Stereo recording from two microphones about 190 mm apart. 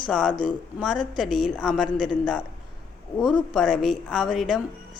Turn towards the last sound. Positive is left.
turn(degrees=0)  # may be behind; listen again after turning